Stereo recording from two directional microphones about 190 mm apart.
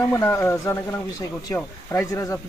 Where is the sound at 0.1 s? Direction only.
15° left (ahead or behind).